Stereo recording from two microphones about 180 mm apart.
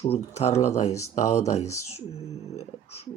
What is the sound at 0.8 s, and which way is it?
Speech, 15° left (ahead or behind).